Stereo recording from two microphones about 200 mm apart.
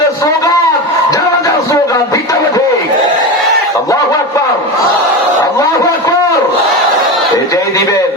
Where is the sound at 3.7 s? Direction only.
15° left (ahead or behind).